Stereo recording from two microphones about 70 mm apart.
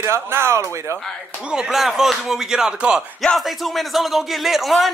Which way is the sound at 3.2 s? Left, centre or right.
Centre.